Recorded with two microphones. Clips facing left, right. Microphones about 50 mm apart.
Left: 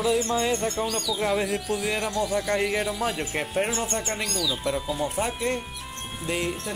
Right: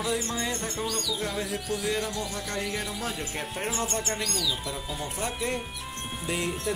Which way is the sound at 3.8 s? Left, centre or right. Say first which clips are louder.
Left 2 dB; centre.